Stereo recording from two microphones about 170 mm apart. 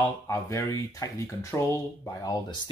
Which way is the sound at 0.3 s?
15° left (ahead or behind).